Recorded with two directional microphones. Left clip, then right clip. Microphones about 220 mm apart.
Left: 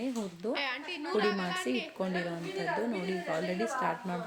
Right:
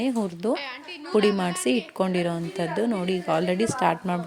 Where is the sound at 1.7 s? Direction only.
40° right (ahead or behind).